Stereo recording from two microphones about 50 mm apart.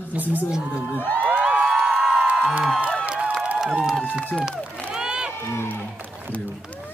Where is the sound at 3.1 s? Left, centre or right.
Right.